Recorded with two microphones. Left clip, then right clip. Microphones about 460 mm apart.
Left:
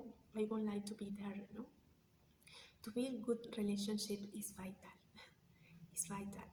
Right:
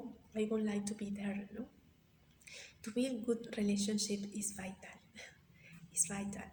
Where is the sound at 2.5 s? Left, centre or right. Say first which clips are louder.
Right 5 dB; left.